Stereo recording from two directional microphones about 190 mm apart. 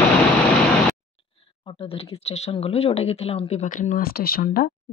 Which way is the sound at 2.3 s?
35° left (ahead or behind).